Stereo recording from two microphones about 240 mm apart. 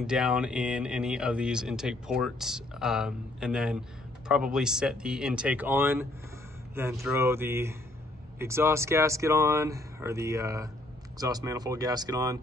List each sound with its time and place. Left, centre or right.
0.0 s speech: centre